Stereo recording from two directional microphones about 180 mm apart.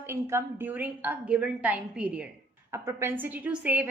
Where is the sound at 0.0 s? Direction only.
15° right (ahead or behind).